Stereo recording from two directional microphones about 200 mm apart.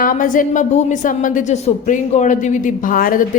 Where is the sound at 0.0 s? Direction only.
45° left (ahead or behind).